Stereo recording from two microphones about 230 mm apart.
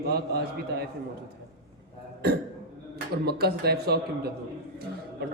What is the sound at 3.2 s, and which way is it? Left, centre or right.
Speech, right.